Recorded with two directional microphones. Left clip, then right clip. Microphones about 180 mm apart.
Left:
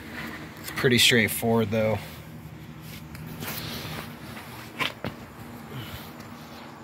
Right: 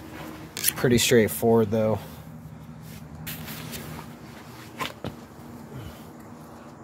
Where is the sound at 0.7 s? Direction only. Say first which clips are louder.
Left 1 dB; 45° right (ahead or behind).